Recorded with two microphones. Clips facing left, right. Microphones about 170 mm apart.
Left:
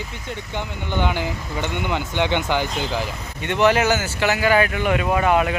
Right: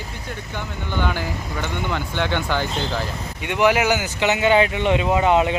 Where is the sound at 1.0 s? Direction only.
20° left (ahead or behind).